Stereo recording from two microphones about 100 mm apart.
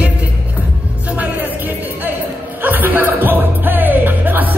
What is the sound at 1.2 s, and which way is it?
Music, 15° right (ahead or behind).